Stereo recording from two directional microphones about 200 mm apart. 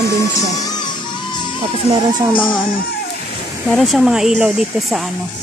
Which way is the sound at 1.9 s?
20° right (ahead or behind).